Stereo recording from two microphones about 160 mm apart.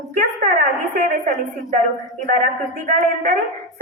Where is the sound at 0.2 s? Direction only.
55° right (ahead or behind).